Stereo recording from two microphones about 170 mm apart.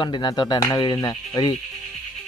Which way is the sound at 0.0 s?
25° left (ahead or behind).